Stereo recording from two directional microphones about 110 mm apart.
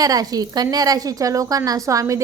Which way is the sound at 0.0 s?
35° right (ahead or behind).